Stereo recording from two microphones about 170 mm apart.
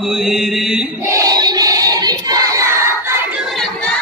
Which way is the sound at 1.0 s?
20° right (ahead or behind).